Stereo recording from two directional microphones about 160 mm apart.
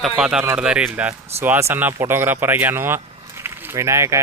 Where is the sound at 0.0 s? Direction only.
5° right (ahead or behind).